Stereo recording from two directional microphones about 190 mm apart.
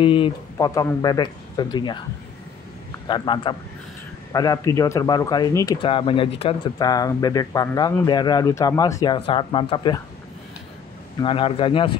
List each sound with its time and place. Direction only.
0.0 s speech: 25° left (ahead or behind)
3.1 s speech: 25° left (ahead or behind)
6.8 s speech: 20° left (ahead or behind)
11.1 s speech: 25° left (ahead or behind)